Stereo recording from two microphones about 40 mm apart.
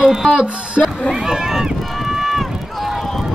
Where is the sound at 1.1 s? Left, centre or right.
Centre.